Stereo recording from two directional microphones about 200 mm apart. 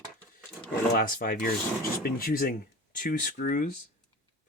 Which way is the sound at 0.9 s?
45° left (ahead or behind).